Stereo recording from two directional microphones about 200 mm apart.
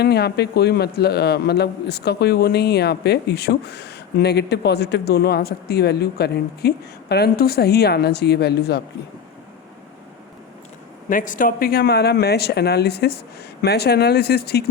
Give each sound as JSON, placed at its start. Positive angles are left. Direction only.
{"t": 0.0, "sound": "a man's voice", "side_deg": 55}
{"t": 11.1, "sound": "speech", "side_deg": 40}